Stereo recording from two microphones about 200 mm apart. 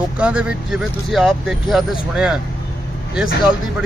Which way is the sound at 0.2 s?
5° right (ahead or behind).